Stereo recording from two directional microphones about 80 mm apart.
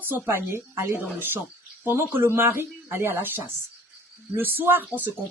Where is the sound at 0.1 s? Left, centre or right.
Right.